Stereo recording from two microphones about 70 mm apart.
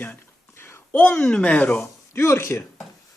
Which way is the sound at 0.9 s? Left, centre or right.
Centre.